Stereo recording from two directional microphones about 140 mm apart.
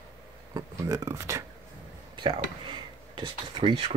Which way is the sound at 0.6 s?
25° right (ahead or behind).